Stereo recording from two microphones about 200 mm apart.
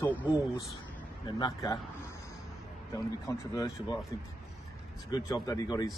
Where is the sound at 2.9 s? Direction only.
15° left (ahead or behind).